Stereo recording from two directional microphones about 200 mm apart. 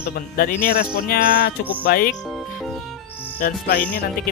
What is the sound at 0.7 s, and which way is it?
Speech, 50° left (ahead or behind).